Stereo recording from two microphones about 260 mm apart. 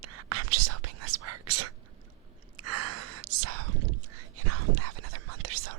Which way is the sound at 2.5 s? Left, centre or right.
Right.